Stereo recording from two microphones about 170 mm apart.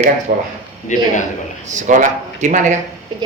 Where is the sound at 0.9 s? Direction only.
45° left (ahead or behind).